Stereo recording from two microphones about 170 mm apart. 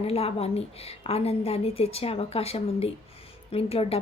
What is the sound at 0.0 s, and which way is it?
A woman's voice, 35° left (ahead or behind).